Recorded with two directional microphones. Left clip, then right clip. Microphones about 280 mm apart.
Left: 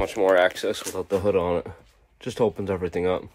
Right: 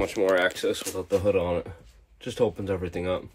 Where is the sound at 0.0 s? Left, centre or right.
Centre.